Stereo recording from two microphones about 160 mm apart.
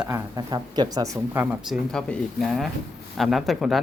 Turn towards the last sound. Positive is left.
turn(degrees=0)  # may be behind; listen again after turning